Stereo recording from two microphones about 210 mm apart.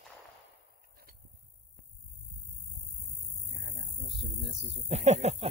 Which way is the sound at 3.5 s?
50° right (ahead or behind).